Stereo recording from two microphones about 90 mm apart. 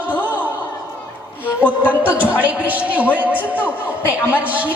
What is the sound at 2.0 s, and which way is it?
A man's voice, 15° right (ahead or behind).